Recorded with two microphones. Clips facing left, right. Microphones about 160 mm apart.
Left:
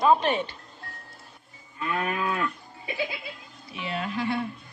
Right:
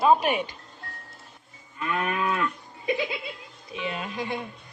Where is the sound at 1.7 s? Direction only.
30° left (ahead or behind).